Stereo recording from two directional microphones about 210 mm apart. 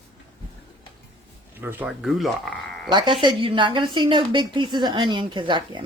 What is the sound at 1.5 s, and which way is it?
Speech, 10° right (ahead or behind).